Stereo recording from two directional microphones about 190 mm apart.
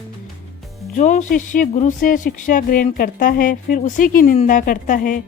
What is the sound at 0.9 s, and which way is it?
Speech, 40° left (ahead or behind).